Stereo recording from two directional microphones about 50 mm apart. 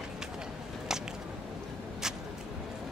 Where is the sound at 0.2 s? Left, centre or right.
Centre.